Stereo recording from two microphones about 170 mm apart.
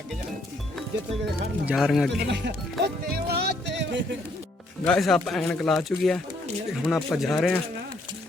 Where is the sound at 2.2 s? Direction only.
85° right.